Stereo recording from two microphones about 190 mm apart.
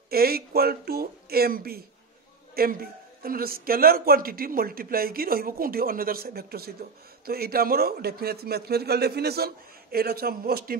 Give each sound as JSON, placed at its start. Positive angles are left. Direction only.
{"t": 0.1, "sound": "a man's voice", "side_deg": -55}